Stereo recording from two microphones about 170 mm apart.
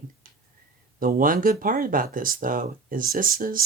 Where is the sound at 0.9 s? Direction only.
55° right (ahead or behind).